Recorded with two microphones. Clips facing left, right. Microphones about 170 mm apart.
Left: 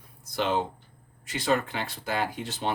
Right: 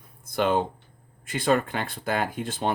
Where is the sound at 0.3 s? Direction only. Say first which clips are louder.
Right 4 dB; 55° right (ahead or behind).